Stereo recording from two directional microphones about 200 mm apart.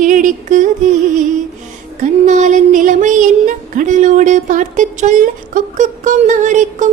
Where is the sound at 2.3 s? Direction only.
40° right (ahead or behind).